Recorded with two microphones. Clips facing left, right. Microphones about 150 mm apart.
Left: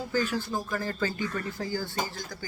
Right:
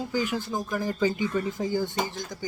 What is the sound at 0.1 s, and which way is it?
A man's voice, 15° right (ahead or behind).